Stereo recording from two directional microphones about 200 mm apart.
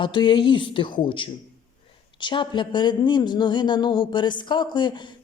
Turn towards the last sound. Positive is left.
turn(degrees=25)  # may be behind; listen again after turning